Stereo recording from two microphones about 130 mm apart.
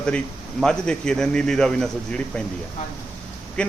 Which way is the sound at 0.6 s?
5° left (ahead or behind).